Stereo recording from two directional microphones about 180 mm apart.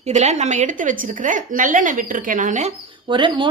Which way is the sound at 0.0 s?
40° right (ahead or behind).